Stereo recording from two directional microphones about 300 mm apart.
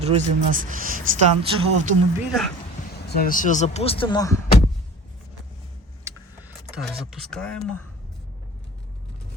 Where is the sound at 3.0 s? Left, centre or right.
Left; by 4.4 s centre.